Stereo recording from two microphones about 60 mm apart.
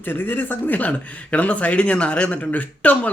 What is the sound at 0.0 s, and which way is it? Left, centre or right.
Speech, left.